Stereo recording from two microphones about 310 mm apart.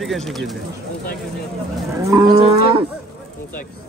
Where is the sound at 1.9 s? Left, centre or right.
Centre.